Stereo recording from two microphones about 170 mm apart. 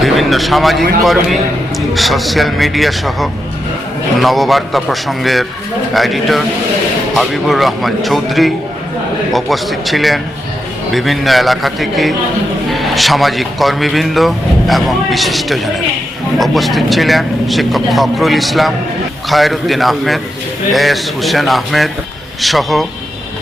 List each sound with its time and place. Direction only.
0.0 s a man's voice: centre (ahead or behind)